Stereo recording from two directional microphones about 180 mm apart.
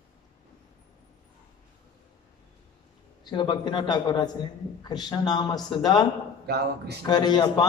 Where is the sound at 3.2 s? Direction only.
25° left (ahead or behind).